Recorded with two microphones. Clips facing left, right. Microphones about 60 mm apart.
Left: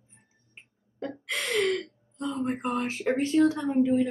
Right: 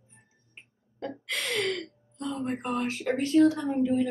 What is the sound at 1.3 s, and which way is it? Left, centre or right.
Gasp, centre.